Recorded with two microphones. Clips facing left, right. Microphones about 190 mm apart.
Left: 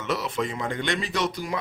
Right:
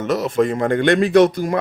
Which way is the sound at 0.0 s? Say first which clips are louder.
Right 10 dB; 45° right (ahead or behind).